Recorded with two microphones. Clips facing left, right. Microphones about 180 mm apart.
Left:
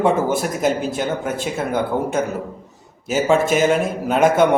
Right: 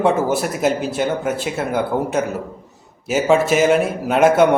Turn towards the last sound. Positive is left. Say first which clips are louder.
# right 2 dB
turn(degrees=-5)  # may be behind; listen again after turning